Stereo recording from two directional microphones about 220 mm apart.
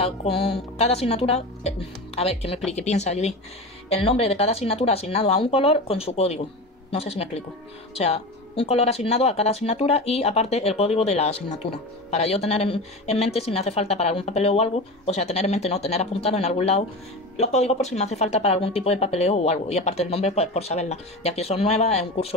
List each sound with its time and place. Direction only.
0.0 s speech: 25° left (ahead or behind)